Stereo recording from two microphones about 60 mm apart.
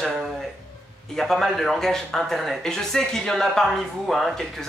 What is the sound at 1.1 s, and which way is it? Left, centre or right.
Speech, centre.